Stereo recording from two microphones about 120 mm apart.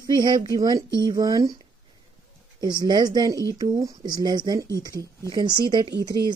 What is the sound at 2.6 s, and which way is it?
Speech, 35° right (ahead or behind).